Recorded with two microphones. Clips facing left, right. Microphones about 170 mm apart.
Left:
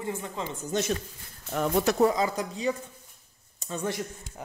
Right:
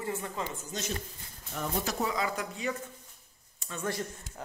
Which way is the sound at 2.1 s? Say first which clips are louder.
Left 5 dB; 35° left (ahead or behind).